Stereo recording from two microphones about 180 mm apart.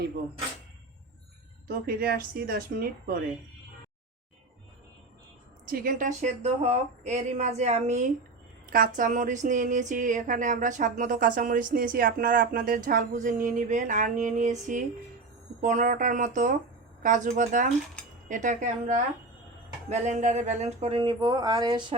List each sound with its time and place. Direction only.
1.6 s speech: 55° right (ahead or behind)
5.6 s speech: 50° right (ahead or behind); by 21.9 s 25° right (ahead or behind)